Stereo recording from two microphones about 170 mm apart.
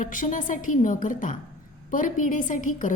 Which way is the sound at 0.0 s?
50° left (ahead or behind).